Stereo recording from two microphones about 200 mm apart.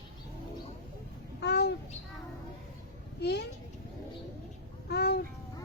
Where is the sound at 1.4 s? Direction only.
55° left (ahead or behind).